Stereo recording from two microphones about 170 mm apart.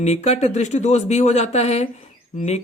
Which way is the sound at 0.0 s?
40° left (ahead or behind).